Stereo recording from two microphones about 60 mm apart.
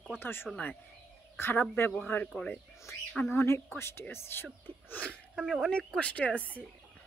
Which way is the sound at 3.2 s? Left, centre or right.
Left.